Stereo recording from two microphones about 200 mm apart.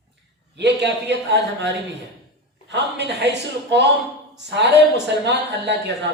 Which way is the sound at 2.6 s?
60° right (ahead or behind).